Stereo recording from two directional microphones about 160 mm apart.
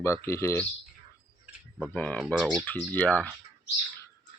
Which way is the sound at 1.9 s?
10° left (ahead or behind).